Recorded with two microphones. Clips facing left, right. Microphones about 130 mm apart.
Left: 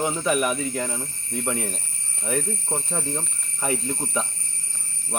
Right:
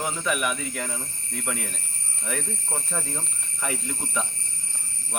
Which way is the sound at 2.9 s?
25° left (ahead or behind).